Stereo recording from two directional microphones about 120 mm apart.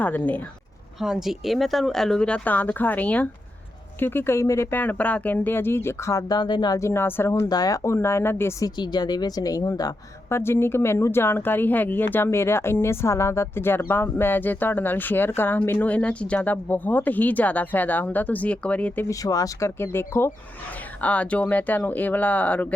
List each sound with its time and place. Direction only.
0.0 s speech: 15° left (ahead or behind)
1.0 s speech: 5° right (ahead or behind); by 6.7 s 35° left (ahead or behind)
6.7 s speech: 20° left (ahead or behind)
8.8 s a woman's voice: 35° left (ahead or behind)
10.3 s speech: 20° left (ahead or behind)
19.0 s speech: 30° left (ahead or behind); by 22.7 s 15° left (ahead or behind)